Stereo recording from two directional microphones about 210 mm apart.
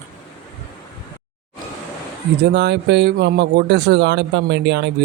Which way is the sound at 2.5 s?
55° right (ahead or behind).